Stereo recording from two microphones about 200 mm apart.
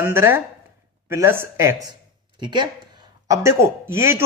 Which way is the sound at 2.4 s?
20° right (ahead or behind).